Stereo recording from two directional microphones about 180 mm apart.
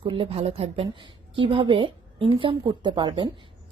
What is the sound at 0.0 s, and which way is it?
A woman's voice, 30° right (ahead or behind).